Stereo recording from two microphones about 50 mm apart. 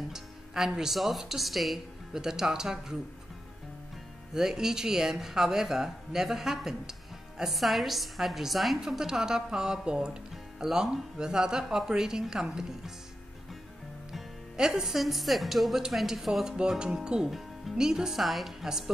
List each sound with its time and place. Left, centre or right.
0.1 s speech: centre
4.3 s speech: centre
14.1 s speech: centre
16.5 s speech: centre